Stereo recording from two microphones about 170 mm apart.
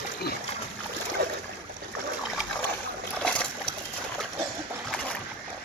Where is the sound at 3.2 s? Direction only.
5° left (ahead or behind).